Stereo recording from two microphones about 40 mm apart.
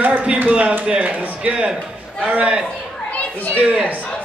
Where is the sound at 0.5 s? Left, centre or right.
Right.